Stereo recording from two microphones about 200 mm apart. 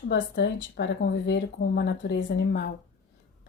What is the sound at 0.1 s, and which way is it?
A woman's voice, 60° left (ahead or behind).